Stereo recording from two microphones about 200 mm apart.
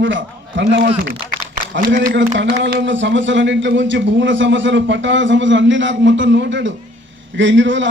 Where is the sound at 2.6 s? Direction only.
65° right (ahead or behind).